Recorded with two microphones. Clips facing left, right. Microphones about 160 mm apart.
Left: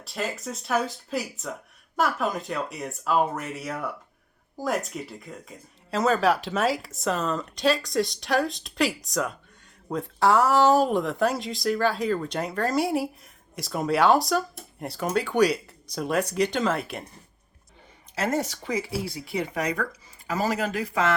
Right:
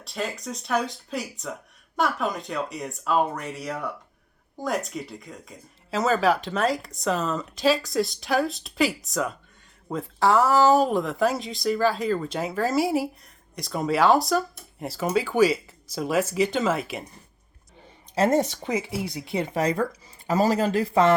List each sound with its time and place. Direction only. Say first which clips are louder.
0.0 s speech: even; centre (ahead or behind)
18.1 s speech: right 6 dB; 30° right (ahead or behind)